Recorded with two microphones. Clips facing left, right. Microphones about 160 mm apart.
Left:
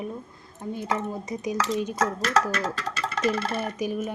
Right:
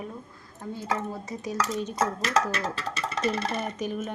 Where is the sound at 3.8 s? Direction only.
10° left (ahead or behind).